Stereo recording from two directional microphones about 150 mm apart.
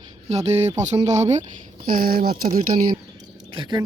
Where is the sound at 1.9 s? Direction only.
75° right (ahead or behind).